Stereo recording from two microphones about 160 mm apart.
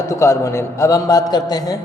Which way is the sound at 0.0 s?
20° left (ahead or behind).